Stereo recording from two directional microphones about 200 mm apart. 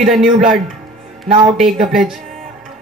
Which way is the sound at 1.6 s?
Centre (ahead or behind).